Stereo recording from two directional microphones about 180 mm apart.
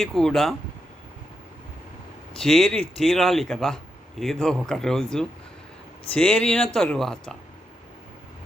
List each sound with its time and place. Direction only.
0.0 s speech: centre (ahead or behind)
2.4 s speech: centre (ahead or behind)